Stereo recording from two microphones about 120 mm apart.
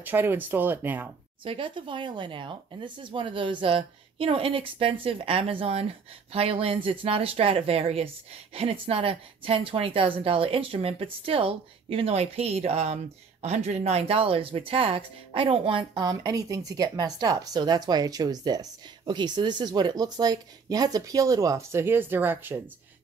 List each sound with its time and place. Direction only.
0.0 s speech: 15° right (ahead or behind)
1.4 s a woman's voice: 45° right (ahead or behind)
16.0 s speech: 35° right (ahead or behind); by 22.6 s 15° right (ahead or behind)